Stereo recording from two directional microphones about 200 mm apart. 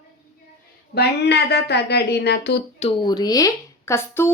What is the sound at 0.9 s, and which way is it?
Speech, 55° left (ahead or behind).